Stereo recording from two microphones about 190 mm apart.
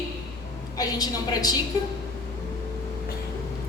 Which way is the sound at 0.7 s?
20° left (ahead or behind).